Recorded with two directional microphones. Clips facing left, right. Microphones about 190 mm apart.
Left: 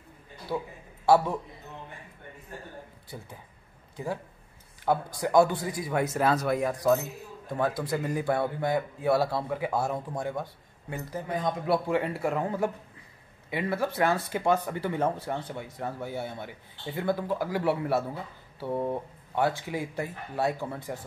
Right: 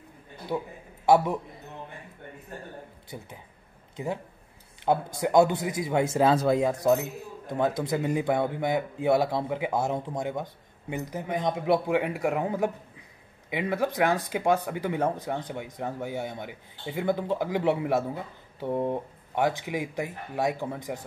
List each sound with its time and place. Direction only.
0.5 s a man's voice: 15° right (ahead or behind)
3.9 s a man's voice: 20° right (ahead or behind)